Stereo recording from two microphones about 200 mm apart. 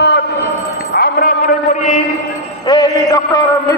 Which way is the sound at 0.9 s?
45° left (ahead or behind).